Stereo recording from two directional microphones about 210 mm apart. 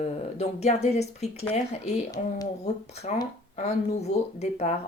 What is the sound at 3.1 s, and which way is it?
Speech, 35° left (ahead or behind).